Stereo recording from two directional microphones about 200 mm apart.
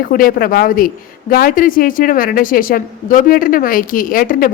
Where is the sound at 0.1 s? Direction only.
45° left (ahead or behind).